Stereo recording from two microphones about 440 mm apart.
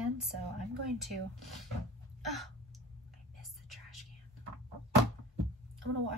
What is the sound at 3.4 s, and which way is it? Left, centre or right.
Whispering, centre.